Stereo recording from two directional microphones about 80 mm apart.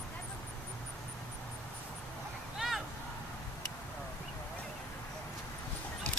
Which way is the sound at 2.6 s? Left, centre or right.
Centre.